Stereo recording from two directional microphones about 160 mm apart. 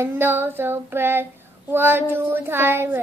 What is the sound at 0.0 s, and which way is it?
A child's voice, 15° right (ahead or behind).